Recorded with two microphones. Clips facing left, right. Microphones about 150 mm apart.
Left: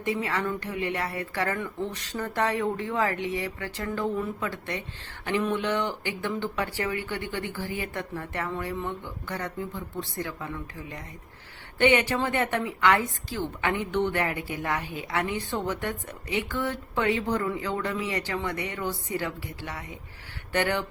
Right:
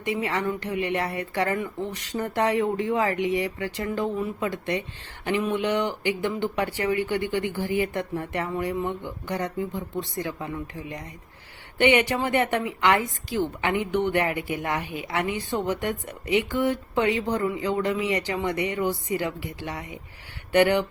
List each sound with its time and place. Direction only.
0.0 s a woman's voice: 15° right (ahead or behind)